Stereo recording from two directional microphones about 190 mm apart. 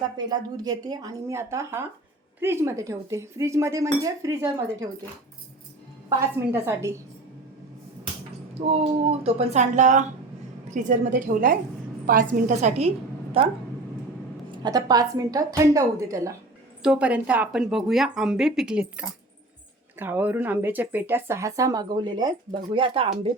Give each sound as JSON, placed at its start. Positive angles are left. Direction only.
{"t": 0.3, "sound": "speech", "side_deg": -20}
{"t": 6.1, "sound": "speech", "side_deg": -15}
{"t": 8.5, "sound": "a woman's voice", "side_deg": -35}
{"t": 14.6, "sound": "speech", "side_deg": -20}
{"t": 16.8, "sound": "speech", "side_deg": -5}